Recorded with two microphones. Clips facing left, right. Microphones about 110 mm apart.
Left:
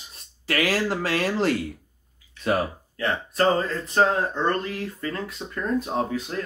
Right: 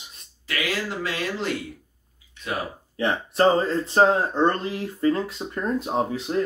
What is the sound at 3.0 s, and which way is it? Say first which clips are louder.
Speech: right 3 dB; 25° right (ahead or behind).